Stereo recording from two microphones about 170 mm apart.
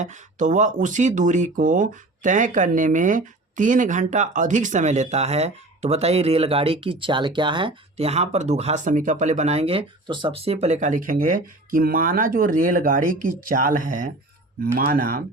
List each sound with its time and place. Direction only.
0.0 s speech: 45° right (ahead or behind)